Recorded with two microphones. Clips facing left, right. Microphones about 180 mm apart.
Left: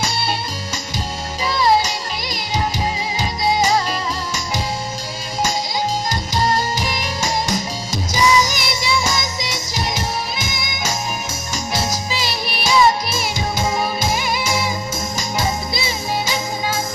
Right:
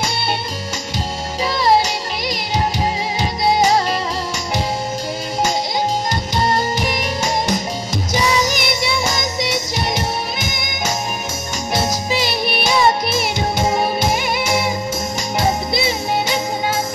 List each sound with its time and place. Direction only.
1.4 s music: 60° right (ahead or behind)
6.3 s music: 60° right (ahead or behind)